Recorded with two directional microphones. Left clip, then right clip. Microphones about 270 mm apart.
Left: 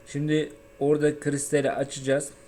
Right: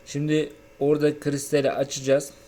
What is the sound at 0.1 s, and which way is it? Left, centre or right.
Speech, centre.